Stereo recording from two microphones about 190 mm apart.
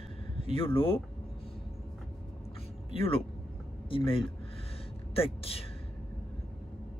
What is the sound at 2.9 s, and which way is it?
Speech, 30° left (ahead or behind).